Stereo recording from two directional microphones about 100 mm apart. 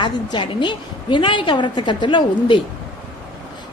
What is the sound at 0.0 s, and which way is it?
A woman's voice, 55° left (ahead or behind).